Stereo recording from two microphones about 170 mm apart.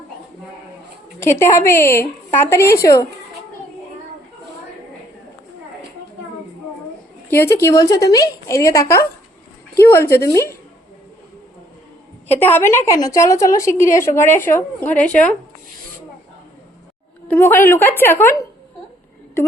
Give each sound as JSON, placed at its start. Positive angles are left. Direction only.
{"t": 1.2, "sound": "a woman's voice", "side_deg": 15}
{"t": 7.3, "sound": "a woman's voice", "side_deg": 15}
{"t": 12.3, "sound": "a woman's voice", "side_deg": 10}
{"t": 17.2, "sound": "a woman's voice", "side_deg": 10}